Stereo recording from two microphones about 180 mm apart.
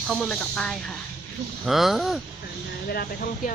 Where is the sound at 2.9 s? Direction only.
55° left (ahead or behind).